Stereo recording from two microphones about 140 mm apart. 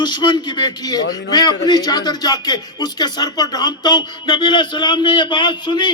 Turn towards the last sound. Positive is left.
turn(degrees=35)  # may be behind; listen again after turning